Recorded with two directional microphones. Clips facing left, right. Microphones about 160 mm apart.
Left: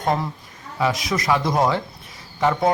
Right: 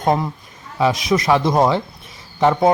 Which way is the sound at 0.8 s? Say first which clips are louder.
Right 5 dB; 20° right (ahead or behind).